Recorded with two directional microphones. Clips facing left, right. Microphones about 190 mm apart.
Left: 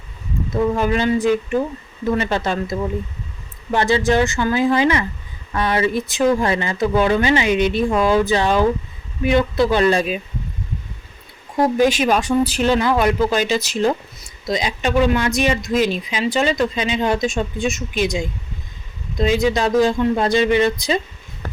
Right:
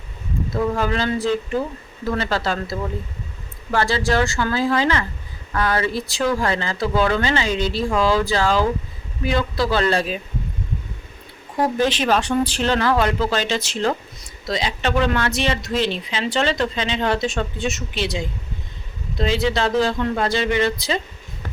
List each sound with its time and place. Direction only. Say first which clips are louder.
0.5 s speech: left 3 dB; 15° left (ahead or behind)
11.6 s speech: left 4 dB; 10° left (ahead or behind)